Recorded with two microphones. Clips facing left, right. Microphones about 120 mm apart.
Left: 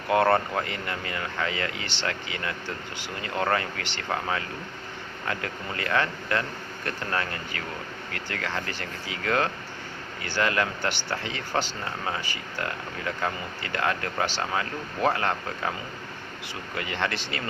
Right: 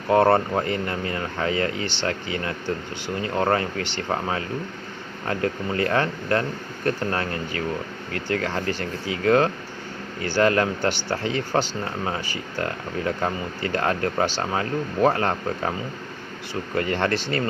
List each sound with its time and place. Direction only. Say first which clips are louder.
0.1 s speech: right 4 dB; 35° right (ahead or behind)
16.7 s speech: right 7 dB; 40° right (ahead or behind)